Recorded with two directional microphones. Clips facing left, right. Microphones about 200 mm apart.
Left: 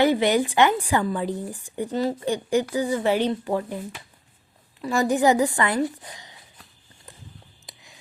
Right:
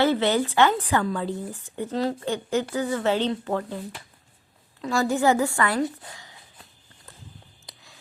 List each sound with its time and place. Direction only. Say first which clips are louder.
0.0 s speech: left 2 dB; 15° left (ahead or behind)
1.9 s a woman's voice: left 1 dB; centre (ahead or behind)
2.2 s speech: left 3 dB; 15° left (ahead or behind)
4.8 s speech: left 2 dB; 15° left (ahead or behind)